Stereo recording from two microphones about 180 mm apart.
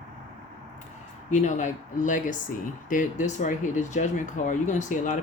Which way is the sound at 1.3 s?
40° left (ahead or behind).